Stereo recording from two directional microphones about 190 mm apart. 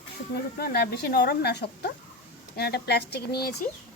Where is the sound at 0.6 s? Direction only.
55° left (ahead or behind).